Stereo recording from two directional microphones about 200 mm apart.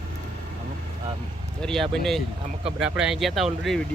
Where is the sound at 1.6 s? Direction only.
Centre (ahead or behind).